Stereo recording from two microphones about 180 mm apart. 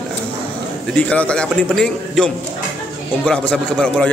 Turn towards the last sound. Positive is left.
turn(degrees=5)  # may be behind; listen again after turning